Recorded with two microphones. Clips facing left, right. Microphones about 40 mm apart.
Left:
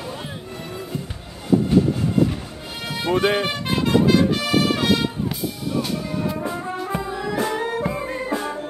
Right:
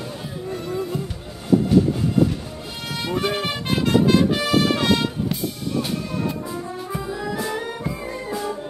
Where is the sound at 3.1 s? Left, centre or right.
Left.